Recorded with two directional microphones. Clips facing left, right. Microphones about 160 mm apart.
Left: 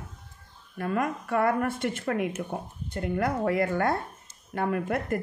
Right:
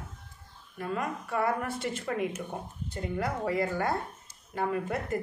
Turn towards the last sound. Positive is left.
turn(degrees=60)  # may be behind; listen again after turning